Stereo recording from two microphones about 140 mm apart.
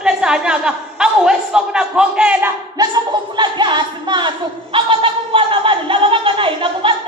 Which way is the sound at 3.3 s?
35° right (ahead or behind).